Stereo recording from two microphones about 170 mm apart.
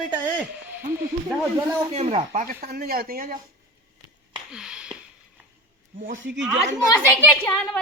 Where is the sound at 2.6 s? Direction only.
65° right (ahead or behind).